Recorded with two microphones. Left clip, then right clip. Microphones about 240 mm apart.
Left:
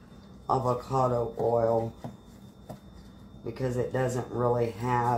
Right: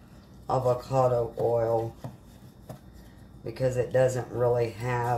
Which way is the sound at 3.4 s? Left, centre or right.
Centre.